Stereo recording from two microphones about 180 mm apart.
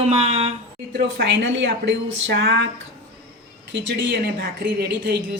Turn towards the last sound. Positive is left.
turn(degrees=-55)  # may be behind; listen again after turning